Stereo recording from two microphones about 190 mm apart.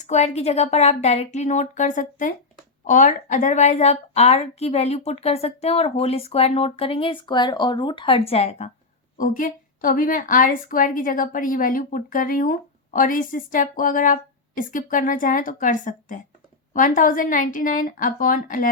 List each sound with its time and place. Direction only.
0.0 s a woman's voice: 35° left (ahead or behind)
9.1 s a woman's voice: 45° left (ahead or behind)